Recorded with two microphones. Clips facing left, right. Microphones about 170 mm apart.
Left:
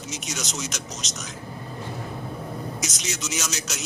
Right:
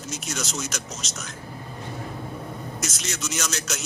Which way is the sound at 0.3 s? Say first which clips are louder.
Right 2 dB; centre (ahead or behind).